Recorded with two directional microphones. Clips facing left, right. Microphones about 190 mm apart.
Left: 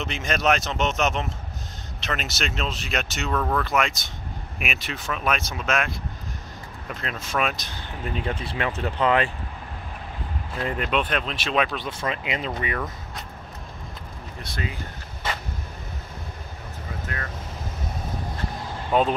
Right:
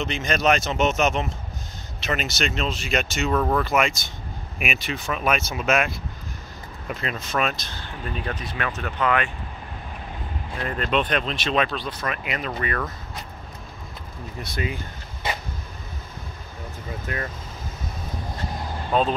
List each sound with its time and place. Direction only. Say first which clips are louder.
0.0 s speech: right 2 dB; 5° left (ahead or behind)
3.3 s speech: right 2 dB; 10° right (ahead or behind)
7.2 s speech: even; 5° left (ahead or behind)
7.6 s speech: left 1 dB; 20° left (ahead or behind)
10.6 s speech: right 1 dB; 15° left (ahead or behind)
11.7 s speech: even; 20° left (ahead or behind)
14.4 s speech: right 3 dB; 10° right (ahead or behind)
18.9 s speech: left 1 dB; 15° left (ahead or behind)